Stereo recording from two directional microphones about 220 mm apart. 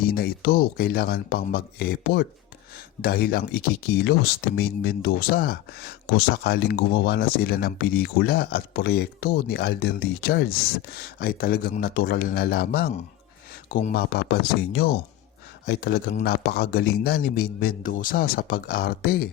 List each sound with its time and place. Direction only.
0.0 s speech: 45° left (ahead or behind)